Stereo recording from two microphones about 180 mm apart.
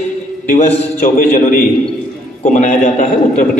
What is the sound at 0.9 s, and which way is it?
A man's voice, 50° left (ahead or behind).